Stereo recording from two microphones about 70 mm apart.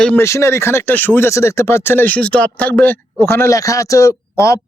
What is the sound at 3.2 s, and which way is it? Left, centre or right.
Speech, left.